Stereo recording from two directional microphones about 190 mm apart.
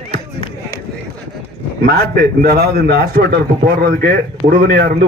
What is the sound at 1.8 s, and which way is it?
A man's voice, 55° right (ahead or behind).